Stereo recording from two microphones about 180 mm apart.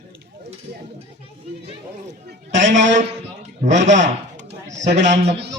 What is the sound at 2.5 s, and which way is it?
A man's voice, 40° right (ahead or behind).